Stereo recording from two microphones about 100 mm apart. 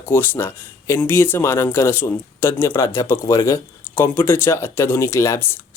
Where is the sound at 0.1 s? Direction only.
25° left (ahead or behind).